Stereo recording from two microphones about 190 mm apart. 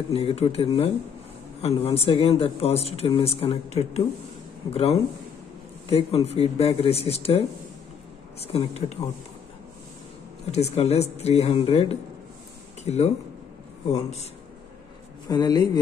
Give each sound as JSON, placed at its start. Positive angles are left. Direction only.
{"t": 0.1, "sound": "a man's voice", "side_deg": 30}
{"t": 10.5, "sound": "speech", "side_deg": 35}
{"t": 15.2, "sound": "a man's voice", "side_deg": 20}